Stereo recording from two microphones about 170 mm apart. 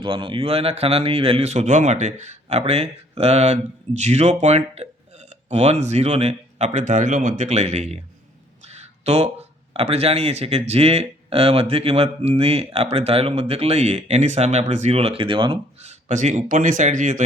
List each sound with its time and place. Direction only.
0.0 s a man's voice: 30° right (ahead or behind)
8.6 s a sound: 40° right (ahead or behind)
9.7 s a man's voice: 35° right (ahead or behind)
15.9 s speech: 45° right (ahead or behind)